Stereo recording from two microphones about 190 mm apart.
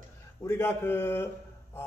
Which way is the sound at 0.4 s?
15° left (ahead or behind).